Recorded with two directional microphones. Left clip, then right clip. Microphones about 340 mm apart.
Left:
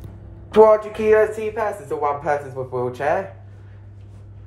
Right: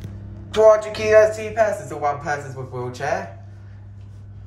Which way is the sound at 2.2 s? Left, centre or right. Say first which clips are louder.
Left 4 dB; centre.